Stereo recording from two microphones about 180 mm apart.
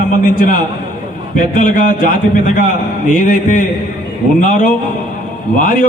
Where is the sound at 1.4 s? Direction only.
50° left (ahead or behind).